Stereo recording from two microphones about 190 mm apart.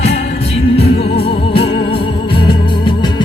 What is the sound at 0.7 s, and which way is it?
Music, 30° left (ahead or behind).